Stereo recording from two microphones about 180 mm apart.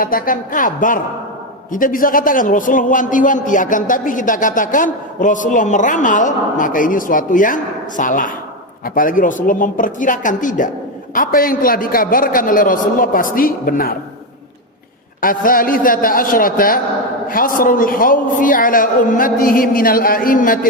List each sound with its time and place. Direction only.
0.0 s a man's voice: 50° left (ahead or behind)
15.2 s a man's voice: 50° left (ahead or behind)